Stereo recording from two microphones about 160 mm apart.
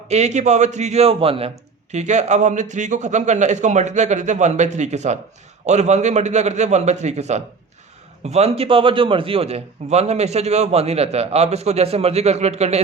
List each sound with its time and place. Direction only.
0.1 s a man's voice: 45° right (ahead or behind)